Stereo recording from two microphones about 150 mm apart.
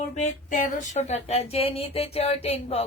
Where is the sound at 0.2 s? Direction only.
55° left (ahead or behind).